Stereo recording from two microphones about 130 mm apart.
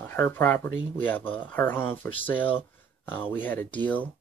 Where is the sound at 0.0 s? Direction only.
20° left (ahead or behind).